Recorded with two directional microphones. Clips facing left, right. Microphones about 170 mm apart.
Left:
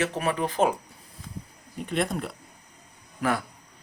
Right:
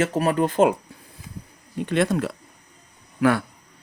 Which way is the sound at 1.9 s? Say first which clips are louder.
Right 6 dB; 90° right.